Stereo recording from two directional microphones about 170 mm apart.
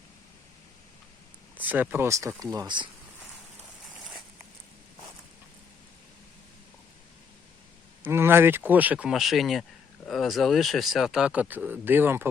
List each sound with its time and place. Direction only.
1.5 s speech: 10° right (ahead or behind); by 2.9 s 25° right (ahead or behind)
8.0 s speech: 15° right (ahead or behind)